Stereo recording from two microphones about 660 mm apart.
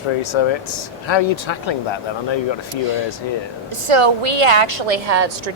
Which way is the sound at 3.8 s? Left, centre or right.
Right.